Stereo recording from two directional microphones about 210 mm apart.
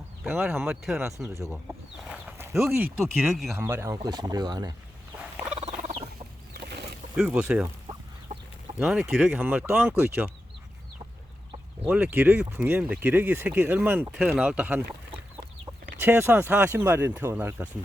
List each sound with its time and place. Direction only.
0.3 s speech: 10° right (ahead or behind)
5.5 s turkey: 35° right (ahead or behind)
6.5 s a sound: 50° right (ahead or behind)
7.2 s speech: 5° right (ahead or behind)
8.3 s chicken: 35° right (ahead or behind)
8.8 s speech: centre (ahead or behind)
11.9 s speech: 5° right (ahead or behind)
16.0 s speech: 10° right (ahead or behind)